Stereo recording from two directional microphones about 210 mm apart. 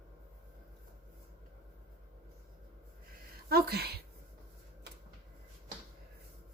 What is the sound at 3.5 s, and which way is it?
Speech, 50° right (ahead or behind).